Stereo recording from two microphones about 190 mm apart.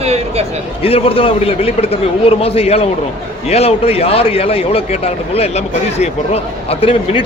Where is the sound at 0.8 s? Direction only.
30° left (ahead or behind).